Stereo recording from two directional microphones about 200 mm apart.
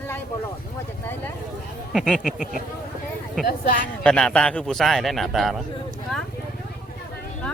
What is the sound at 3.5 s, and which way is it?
Speech, 40° left (ahead or behind).